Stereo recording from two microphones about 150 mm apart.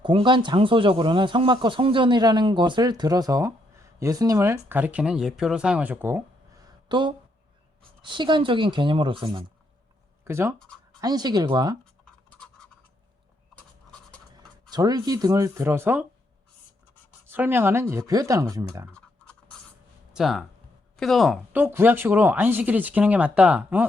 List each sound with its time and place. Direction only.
0.0 s speech: 35° right (ahead or behind); by 6.2 s 15° right (ahead or behind)
6.8 s speech: 30° right (ahead or behind)
10.2 s speech: 15° right (ahead or behind)
14.7 s speech: 25° right (ahead or behind)
17.2 s speech: 15° right (ahead or behind)
20.1 s speech: centre (ahead or behind)
21.5 s speech: 15° right (ahead or behind)